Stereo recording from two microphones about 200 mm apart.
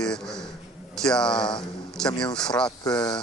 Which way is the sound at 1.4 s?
20° left (ahead or behind).